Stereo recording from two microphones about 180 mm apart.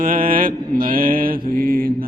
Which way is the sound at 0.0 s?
50° right (ahead or behind).